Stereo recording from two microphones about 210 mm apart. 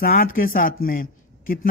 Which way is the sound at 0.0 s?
40° left (ahead or behind).